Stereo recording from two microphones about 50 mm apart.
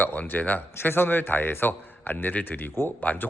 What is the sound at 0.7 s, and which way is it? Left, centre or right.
A man's voice, left.